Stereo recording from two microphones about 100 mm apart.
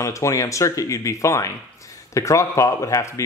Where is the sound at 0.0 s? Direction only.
30° left (ahead or behind).